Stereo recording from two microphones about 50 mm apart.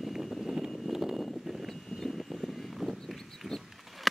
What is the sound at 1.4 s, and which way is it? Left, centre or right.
Vehicle, centre.